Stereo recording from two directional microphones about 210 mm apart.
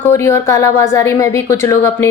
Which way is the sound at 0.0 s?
15° left (ahead or behind).